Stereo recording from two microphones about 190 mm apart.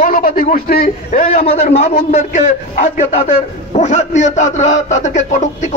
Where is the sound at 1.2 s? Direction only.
35° left (ahead or behind).